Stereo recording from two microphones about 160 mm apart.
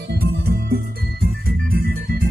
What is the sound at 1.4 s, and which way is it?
Organ, 65° right (ahead or behind).